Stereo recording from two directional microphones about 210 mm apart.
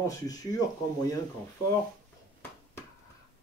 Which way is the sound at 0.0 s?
15° left (ahead or behind).